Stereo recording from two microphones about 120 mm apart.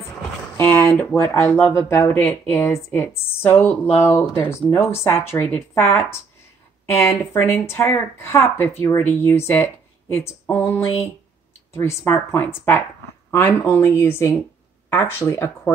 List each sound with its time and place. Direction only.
0.6 s speech: 15° left (ahead or behind)
9.5 s a sound: 20° left (ahead or behind)
10.4 s speech: 20° left (ahead or behind)